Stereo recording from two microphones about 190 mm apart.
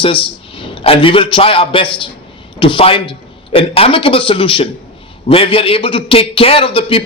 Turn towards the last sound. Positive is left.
turn(degrees=30)  # may be behind; listen again after turning